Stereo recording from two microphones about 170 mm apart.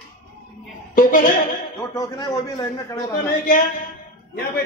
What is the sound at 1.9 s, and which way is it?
A man's voice, 20° left (ahead or behind).